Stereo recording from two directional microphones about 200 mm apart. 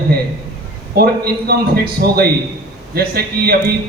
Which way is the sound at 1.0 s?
50° right (ahead or behind).